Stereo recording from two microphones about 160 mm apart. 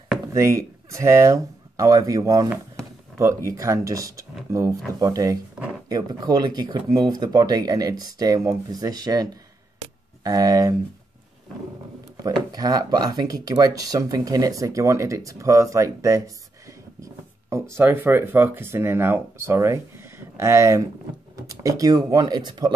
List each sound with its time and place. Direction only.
0.3 s speech: 20° right (ahead or behind)
12.3 s speech: 25° right (ahead or behind)